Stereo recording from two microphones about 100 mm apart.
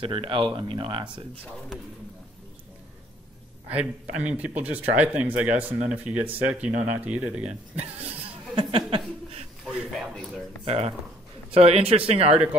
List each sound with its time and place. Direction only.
0.0 s speech: 65° right (ahead or behind)
3.7 s speech: 15° right (ahead or behind)
8.5 s speech: 60° right (ahead or behind)
9.9 s a sound: centre (ahead or behind)
10.6 s speech: 75° right (ahead or behind); by 12.4 s 90° right